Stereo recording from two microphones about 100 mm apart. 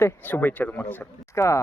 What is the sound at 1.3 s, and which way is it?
Speech, 30° left (ahead or behind).